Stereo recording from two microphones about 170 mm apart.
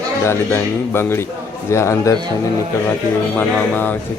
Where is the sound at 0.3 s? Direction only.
15° left (ahead or behind).